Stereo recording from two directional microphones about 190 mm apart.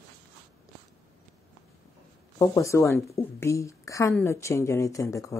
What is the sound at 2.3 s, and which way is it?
A woman's voice, 15° left (ahead or behind).